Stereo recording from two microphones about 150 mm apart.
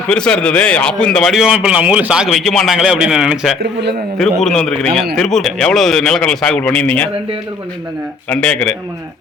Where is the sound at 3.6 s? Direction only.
90° right.